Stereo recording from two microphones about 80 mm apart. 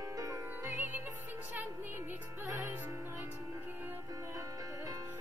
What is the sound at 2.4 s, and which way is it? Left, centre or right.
Music, right.